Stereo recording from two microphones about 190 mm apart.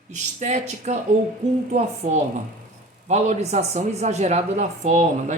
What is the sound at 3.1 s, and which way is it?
Speech, 35° right (ahead or behind).